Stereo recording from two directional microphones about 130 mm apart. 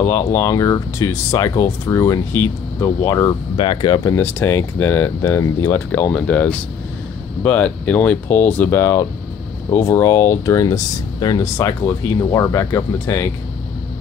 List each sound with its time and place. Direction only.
0.0 s speech: 20° left (ahead or behind)
3.5 s speech: 35° left (ahead or behind)
4.1 s speech: 15° left (ahead or behind)